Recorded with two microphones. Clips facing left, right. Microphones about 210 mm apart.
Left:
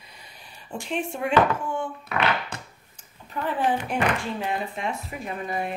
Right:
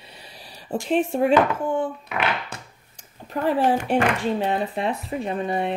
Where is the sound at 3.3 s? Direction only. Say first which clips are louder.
Right 5 dB; 40° right (ahead or behind).